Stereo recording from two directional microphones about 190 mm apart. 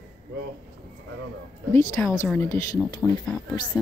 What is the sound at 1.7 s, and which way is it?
Speech, 15° left (ahead or behind).